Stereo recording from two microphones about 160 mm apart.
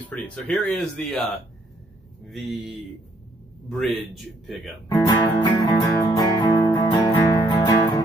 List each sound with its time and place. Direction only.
0.1 s speech: 5° left (ahead or behind)
3.6 s speech: centre (ahead or behind)
4.8 s music: 15° left (ahead or behind)